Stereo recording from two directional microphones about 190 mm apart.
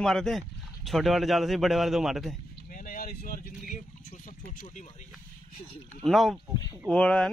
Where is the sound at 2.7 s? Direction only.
45° left (ahead or behind).